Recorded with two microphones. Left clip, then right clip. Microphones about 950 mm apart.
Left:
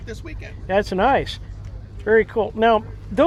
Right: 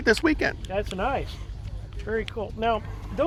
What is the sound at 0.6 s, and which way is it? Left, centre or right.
Speech, left.